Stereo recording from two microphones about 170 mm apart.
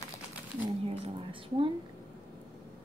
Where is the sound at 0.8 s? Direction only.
30° right (ahead or behind).